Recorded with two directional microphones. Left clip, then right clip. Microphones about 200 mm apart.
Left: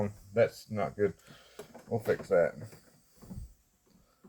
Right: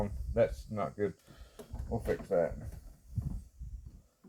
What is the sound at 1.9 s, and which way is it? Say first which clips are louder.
Speech: left 4 dB; 30° left (ahead or behind).